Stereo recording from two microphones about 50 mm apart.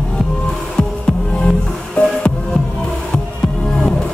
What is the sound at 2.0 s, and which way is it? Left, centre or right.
Music, left.